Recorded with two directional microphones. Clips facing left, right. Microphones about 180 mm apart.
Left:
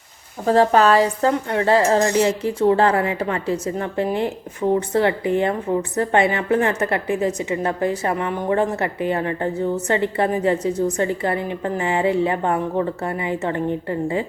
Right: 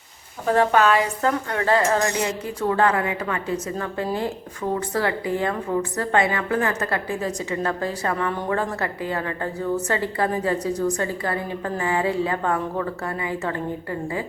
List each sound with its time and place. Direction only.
0.4 s a woman's voice: 35° left (ahead or behind)